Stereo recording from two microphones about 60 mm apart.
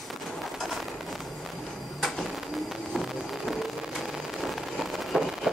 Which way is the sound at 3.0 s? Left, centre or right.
Centre.